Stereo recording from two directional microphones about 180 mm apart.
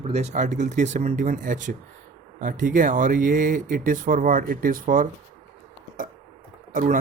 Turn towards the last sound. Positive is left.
turn(degrees=-50)  # may be behind; listen again after turning